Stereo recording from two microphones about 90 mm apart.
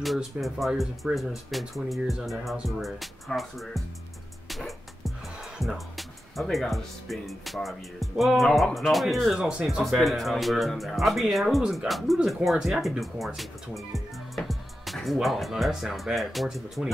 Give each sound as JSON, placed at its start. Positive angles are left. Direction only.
{"t": 0.0, "sound": "speech", "side_deg": 0}
{"t": 4.5, "sound": "music", "side_deg": 0}
{"t": 8.7, "sound": "speech", "side_deg": 0}